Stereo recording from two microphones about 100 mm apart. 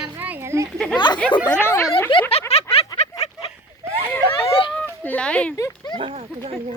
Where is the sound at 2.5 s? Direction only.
85° left.